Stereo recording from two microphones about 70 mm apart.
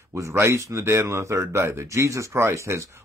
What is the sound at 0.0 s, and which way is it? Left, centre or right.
Speech, right.